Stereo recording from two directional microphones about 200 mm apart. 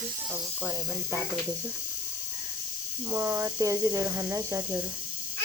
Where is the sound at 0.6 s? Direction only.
10° right (ahead or behind).